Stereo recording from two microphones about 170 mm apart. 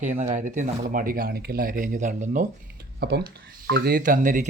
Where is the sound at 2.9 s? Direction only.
70° right (ahead or behind); by 4.5 s 50° right (ahead or behind).